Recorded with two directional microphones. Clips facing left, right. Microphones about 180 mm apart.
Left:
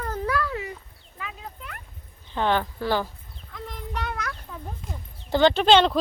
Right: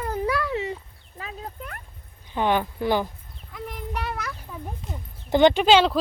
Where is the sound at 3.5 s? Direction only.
10° right (ahead or behind).